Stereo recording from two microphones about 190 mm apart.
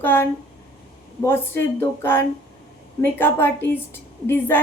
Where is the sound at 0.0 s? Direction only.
10° left (ahead or behind).